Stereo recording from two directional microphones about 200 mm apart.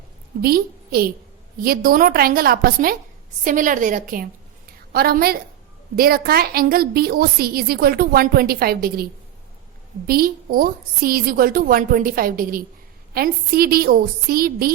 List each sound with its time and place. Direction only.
0.4 s a woman's voice: 50° right (ahead or behind)
10.1 s a woman's voice: 50° right (ahead or behind)